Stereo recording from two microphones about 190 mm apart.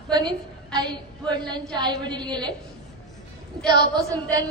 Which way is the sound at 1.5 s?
25° right (ahead or behind).